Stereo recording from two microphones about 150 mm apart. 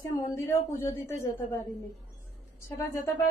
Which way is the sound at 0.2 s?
15° left (ahead or behind).